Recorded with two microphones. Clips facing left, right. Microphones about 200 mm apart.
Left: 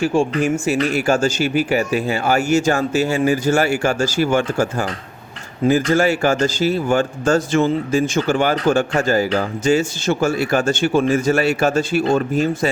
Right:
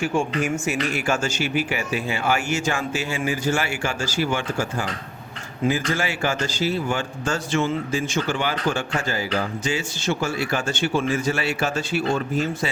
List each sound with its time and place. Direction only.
0.0 s speech: 30° left (ahead or behind)